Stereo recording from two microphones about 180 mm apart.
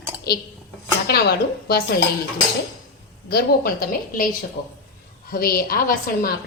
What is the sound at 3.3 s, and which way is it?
A woman's voice, 60° left (ahead or behind).